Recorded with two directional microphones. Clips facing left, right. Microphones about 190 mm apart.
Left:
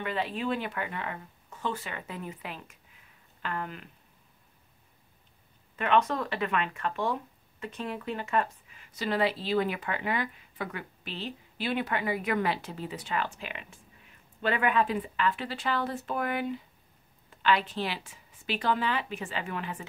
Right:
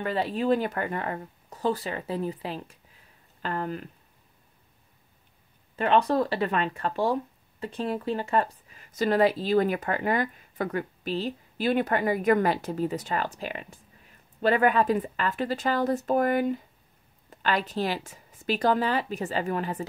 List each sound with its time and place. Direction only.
0.0 s speech: 40° right (ahead or behind)
5.8 s speech: 35° right (ahead or behind)